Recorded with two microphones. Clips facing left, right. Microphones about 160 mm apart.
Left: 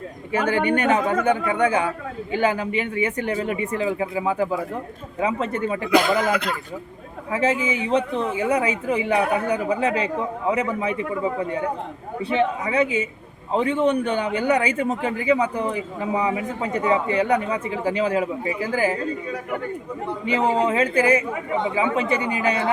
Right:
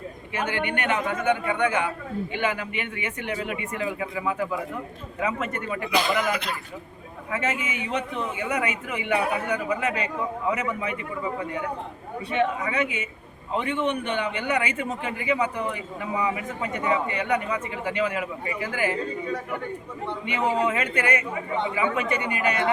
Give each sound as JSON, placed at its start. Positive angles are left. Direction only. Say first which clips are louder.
{"t": 0.4, "sound": "a man's voice", "louder": "left 7 dB", "side_deg": 40}
{"t": 7.3, "sound": "a man's voice", "louder": "left 7 dB", "side_deg": 30}
{"t": 20.2, "sound": "a man's voice", "louder": "left 4 dB", "side_deg": 30}